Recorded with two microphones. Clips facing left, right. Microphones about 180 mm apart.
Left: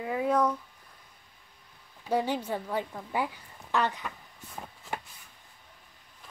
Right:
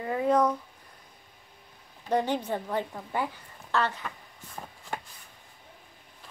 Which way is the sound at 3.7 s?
15° left (ahead or behind).